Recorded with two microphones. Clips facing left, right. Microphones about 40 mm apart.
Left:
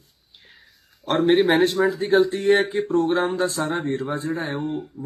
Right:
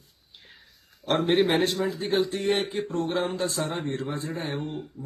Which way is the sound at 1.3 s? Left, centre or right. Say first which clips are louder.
Left 5 dB; centre.